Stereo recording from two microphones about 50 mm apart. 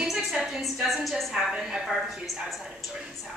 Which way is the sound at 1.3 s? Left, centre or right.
Centre.